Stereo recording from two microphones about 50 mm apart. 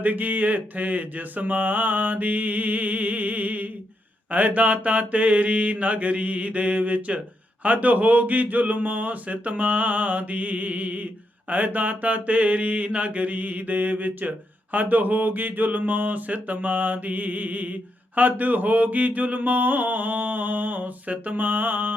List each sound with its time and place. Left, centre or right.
0.0 s speech: right
4.3 s mantra: right
7.6 s speech: right